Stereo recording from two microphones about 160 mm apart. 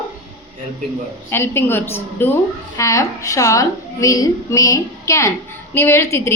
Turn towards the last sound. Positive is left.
turn(degrees=15)  # may be behind; listen again after turning